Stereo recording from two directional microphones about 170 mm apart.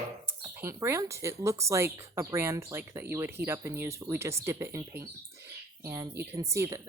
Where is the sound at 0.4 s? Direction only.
20° right (ahead or behind).